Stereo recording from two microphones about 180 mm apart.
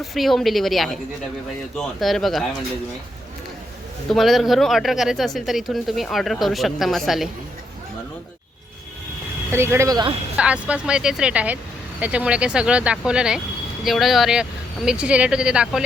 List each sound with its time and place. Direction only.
0.0 s speech: centre (ahead or behind)
4.1 s speech: centre (ahead or behind)
9.5 s speech: 15° right (ahead or behind)
10.3 s speech: 5° right (ahead or behind)